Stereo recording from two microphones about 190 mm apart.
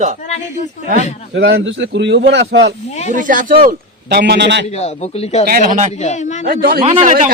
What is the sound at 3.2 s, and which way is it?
Speech, 45° right (ahead or behind).